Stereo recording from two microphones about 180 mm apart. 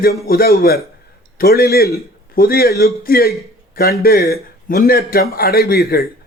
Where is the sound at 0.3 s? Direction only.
60° left (ahead or behind).